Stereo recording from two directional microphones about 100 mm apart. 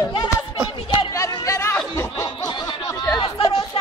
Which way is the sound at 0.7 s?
60° left (ahead or behind).